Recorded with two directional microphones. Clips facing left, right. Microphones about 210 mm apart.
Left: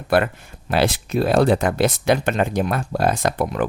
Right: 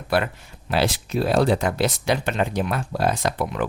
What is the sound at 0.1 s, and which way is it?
Speech, 50° left (ahead or behind).